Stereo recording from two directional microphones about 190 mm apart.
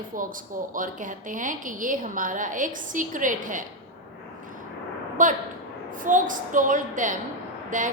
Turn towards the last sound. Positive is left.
turn(degrees=-45)  # may be behind; listen again after turning